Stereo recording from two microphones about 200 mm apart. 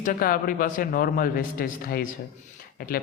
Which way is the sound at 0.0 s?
45° left (ahead or behind).